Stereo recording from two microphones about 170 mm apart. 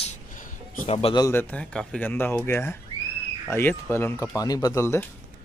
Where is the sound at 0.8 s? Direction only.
35° left (ahead or behind).